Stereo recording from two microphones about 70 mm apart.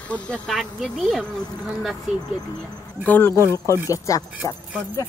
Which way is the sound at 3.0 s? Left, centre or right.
Left.